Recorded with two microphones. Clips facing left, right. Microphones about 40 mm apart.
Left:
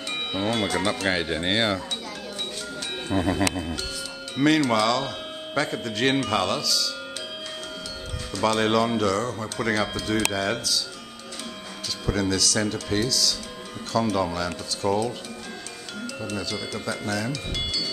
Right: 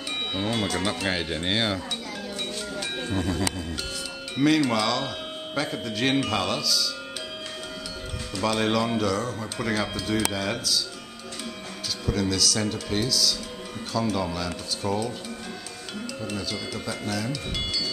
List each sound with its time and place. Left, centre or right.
0.3 s speech: centre
3.1 s music: left
4.6 s speech: centre
8.5 s speech: centre
12.1 s speech: centre
16.3 s speech: centre